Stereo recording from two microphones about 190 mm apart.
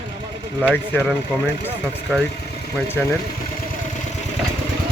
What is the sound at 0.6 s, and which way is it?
Speech, 10° left (ahead or behind).